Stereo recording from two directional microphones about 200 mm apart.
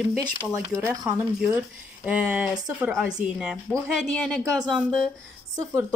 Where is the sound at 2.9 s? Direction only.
5° right (ahead or behind).